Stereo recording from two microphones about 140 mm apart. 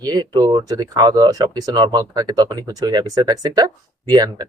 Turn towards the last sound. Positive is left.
turn(degrees=-25)  # may be behind; listen again after turning